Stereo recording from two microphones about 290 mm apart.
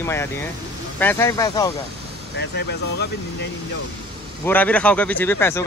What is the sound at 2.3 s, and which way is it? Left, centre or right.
Speech, left.